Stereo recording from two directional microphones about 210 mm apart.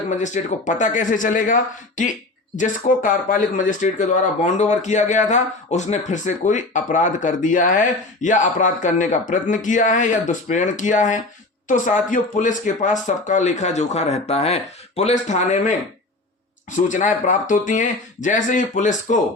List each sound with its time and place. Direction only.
0.1 s speech: 35° left (ahead or behind)
16.7 s speech: 35° left (ahead or behind)